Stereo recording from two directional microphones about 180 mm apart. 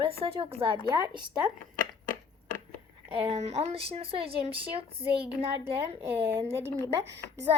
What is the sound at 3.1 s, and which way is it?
Speech, 30° right (ahead or behind).